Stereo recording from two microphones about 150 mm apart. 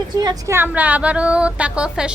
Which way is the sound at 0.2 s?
25° right (ahead or behind).